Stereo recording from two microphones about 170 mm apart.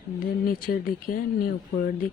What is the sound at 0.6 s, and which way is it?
Speech, 55° left (ahead or behind).